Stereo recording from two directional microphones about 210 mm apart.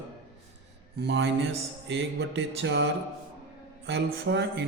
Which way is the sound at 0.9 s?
55° right (ahead or behind).